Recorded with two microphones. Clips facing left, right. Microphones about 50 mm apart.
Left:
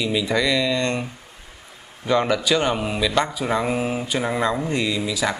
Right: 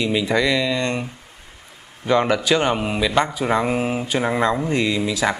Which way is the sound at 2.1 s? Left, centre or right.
Centre.